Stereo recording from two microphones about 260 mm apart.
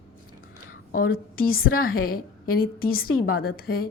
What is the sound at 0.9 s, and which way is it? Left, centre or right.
A woman's voice, left.